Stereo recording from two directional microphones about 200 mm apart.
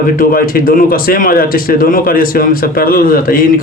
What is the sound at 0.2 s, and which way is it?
A man's voice, 45° left (ahead or behind).